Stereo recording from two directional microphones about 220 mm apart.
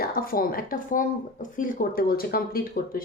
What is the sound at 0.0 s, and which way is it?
Speech, 40° left (ahead or behind).